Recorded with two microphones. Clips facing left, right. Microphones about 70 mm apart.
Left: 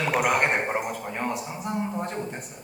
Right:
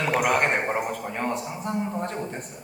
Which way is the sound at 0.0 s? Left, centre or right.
Centre.